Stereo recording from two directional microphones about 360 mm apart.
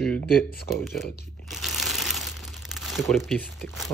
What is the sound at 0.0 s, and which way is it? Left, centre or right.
Speech, centre.